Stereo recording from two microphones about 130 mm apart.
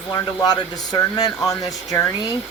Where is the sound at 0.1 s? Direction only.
30° left (ahead or behind).